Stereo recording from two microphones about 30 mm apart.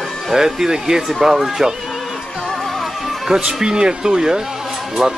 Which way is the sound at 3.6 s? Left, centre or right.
Right.